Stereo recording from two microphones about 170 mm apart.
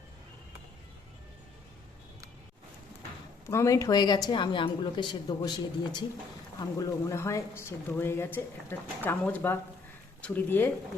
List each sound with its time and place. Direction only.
3.4 s a woman's voice: 15° left (ahead or behind)